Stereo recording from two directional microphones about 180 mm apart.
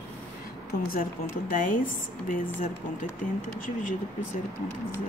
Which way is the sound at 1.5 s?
50° left (ahead or behind).